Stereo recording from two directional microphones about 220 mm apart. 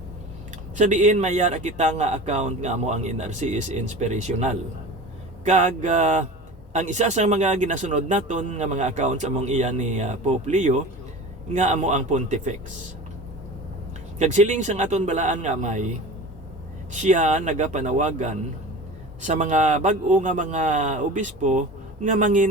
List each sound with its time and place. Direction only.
0.8 s speech: 35° right (ahead or behind)
14.2 s speech: 30° right (ahead or behind)
16.9 s speech: 35° right (ahead or behind)